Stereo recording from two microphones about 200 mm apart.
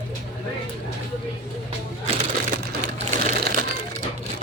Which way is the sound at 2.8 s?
35° right (ahead or behind).